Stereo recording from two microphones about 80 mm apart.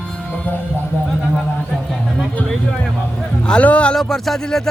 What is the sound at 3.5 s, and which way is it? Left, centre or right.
Speech, centre.